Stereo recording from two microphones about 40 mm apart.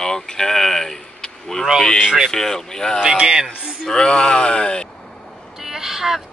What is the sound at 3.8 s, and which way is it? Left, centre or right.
Speech, left.